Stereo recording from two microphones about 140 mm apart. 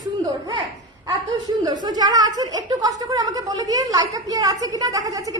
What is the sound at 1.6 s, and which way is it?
A woman's voice, 30° right (ahead or behind).